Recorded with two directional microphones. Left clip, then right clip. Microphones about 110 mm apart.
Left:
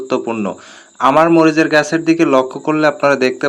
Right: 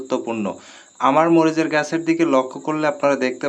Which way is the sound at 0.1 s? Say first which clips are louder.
Left 5 dB; 25° left (ahead or behind).